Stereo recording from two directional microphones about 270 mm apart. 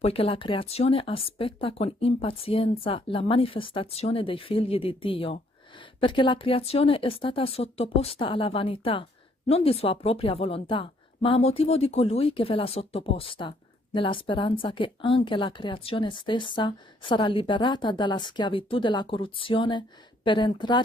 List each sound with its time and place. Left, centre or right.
0.0 s a woman's voice: left